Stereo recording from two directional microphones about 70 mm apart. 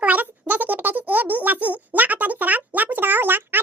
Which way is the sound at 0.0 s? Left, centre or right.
Right.